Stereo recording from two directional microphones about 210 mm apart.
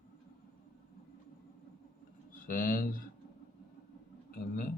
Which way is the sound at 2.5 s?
40° left (ahead or behind).